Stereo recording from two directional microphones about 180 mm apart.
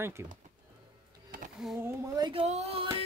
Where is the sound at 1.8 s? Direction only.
25° right (ahead or behind).